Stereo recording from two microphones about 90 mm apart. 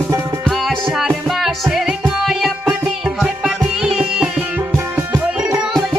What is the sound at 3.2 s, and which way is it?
Music, 10° right (ahead or behind).